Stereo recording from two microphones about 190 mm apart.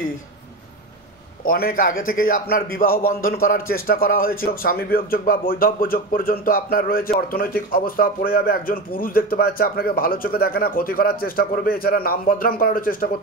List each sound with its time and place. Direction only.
1.4 s a man's voice: 50° left (ahead or behind)